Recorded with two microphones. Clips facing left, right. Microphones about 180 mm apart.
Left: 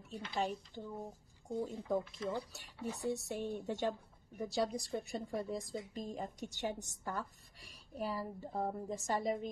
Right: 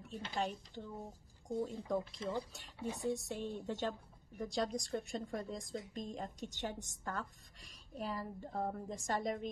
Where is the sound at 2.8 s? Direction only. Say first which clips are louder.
Even; 10° right (ahead or behind).